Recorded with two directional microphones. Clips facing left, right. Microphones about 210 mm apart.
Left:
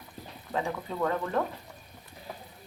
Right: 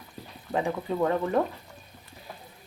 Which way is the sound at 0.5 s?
20° right (ahead or behind).